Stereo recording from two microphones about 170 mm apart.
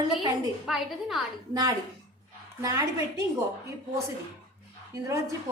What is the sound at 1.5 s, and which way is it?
A woman's voice, 20° right (ahead or behind).